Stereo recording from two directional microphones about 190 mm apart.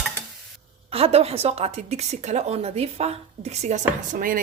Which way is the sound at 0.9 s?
30° right (ahead or behind).